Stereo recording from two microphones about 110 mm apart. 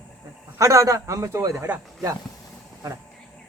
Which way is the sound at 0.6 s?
30° right (ahead or behind).